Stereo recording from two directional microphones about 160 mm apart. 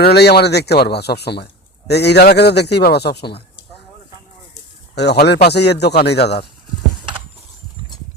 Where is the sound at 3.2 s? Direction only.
90° left.